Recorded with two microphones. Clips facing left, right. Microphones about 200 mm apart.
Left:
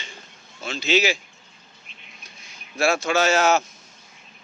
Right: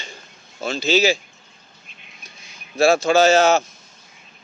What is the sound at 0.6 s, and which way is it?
Speech, 35° right (ahead or behind).